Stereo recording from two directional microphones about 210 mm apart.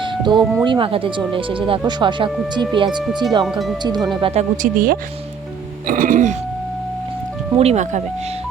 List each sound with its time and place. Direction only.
0.0 s music: 20° right (ahead or behind)
0.6 s speech: 25° right (ahead or behind)
3.4 s speech: centre (ahead or behind)
3.8 s speech: 20° right (ahead or behind)
4.2 s speech: 35° right (ahead or behind)
7.5 s speech: 30° right (ahead or behind)